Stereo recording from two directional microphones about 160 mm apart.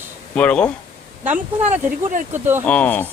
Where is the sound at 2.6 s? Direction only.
10° left (ahead or behind).